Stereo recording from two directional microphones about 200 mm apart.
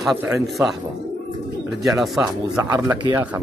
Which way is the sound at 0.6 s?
15° right (ahead or behind).